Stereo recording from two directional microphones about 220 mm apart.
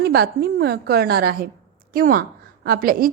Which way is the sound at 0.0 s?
45° right (ahead or behind).